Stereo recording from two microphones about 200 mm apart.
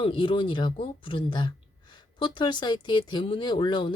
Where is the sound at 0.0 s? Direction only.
25° left (ahead or behind).